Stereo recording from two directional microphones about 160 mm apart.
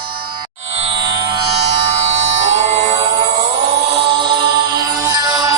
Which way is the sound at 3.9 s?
30° right (ahead or behind).